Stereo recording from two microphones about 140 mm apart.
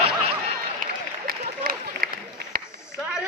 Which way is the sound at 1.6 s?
90° right.